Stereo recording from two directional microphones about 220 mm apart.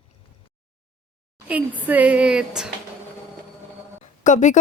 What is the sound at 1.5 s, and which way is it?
A woman's voice, 5° right (ahead or behind).